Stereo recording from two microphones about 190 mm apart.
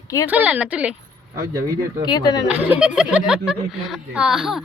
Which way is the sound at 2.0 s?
20° left (ahead or behind).